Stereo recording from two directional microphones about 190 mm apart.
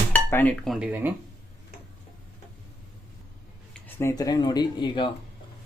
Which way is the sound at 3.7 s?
15° left (ahead or behind).